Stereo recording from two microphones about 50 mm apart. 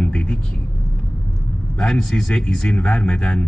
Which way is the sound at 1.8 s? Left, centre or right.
Centre.